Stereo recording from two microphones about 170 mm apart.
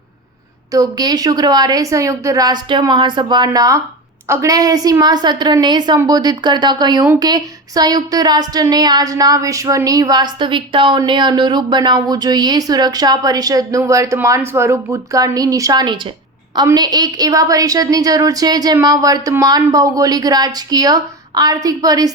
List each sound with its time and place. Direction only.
0.7 s speech: 20° right (ahead or behind)